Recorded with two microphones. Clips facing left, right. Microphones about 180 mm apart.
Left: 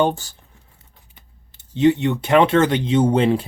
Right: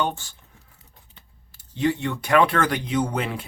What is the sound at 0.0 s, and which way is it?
Speech, 40° left (ahead or behind).